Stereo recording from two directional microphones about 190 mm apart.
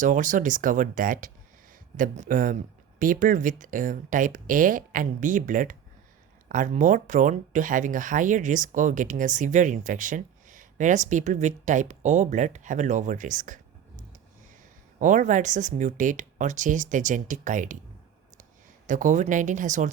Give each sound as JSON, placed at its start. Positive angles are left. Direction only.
{"t": 0.0, "sound": "speech", "side_deg": -40}
{"t": 14.9, "sound": "speech", "side_deg": -40}
{"t": 18.9, "sound": "speech", "side_deg": -40}